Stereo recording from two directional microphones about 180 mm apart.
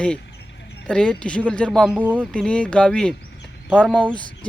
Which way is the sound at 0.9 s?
5° left (ahead or behind).